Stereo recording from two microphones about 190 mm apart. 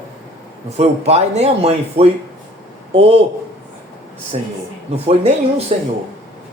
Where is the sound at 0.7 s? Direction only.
35° right (ahead or behind).